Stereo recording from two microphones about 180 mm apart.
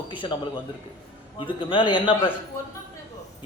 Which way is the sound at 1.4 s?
25° left (ahead or behind).